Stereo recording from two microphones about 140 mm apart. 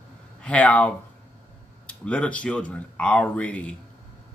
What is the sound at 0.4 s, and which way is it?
Speech, 10° left (ahead or behind).